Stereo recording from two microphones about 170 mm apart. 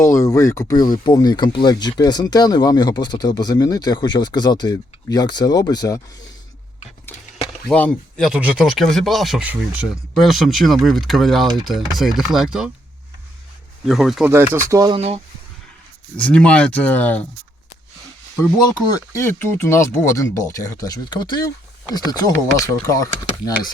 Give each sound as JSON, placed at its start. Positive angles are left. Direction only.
{"t": 0.0, "sound": "speech", "side_deg": 15}
{"t": 7.7, "sound": "speech", "side_deg": 5}
{"t": 8.3, "sound": "speech", "side_deg": -5}
{"t": 13.8, "sound": "speech", "side_deg": 0}
{"t": 14.3, "sound": "speech", "side_deg": -15}
{"t": 14.9, "sound": "speech", "side_deg": -35}
{"t": 16.1, "sound": "speech", "side_deg": 5}
{"t": 19.1, "sound": "speech", "side_deg": 15}